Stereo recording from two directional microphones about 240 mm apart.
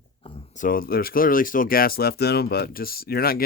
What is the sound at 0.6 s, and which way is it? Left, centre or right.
Speech, left.